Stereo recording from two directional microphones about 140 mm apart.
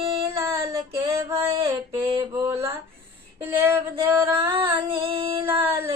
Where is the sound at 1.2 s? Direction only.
20° right (ahead or behind).